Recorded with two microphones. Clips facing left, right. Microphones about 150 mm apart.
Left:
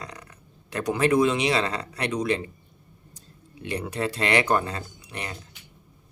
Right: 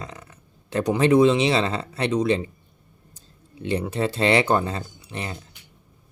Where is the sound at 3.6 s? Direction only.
30° right (ahead or behind).